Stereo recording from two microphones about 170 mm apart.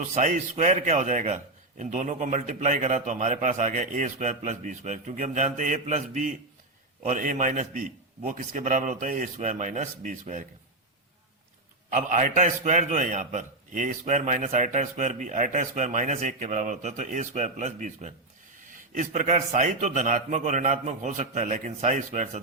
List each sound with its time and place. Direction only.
0.1 s a man's voice: 45° right (ahead or behind)
11.9 s a man's voice: 50° right (ahead or behind)